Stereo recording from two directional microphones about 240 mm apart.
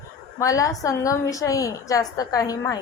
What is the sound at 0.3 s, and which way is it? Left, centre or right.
A woman's voice, centre.